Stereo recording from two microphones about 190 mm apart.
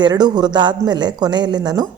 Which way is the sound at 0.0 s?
20° right (ahead or behind).